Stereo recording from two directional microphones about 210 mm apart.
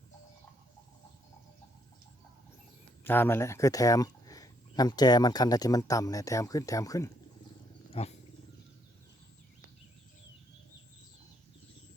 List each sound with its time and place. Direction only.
3.0 s speech: 10° left (ahead or behind)
8.0 s wild animals: 25° left (ahead or behind)